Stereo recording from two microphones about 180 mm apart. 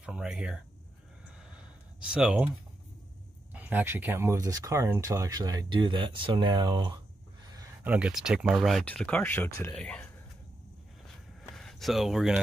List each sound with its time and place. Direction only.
0.0 s speech: 5° right (ahead or behind)
2.1 s speech: 5° right (ahead or behind)
3.5 s speech: 10° right (ahead or behind)
7.8 s speech: 5° right (ahead or behind)
11.5 s speech: centre (ahead or behind)